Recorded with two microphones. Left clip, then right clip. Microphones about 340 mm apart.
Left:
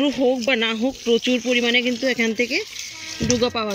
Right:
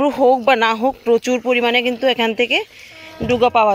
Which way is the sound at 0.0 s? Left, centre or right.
Right.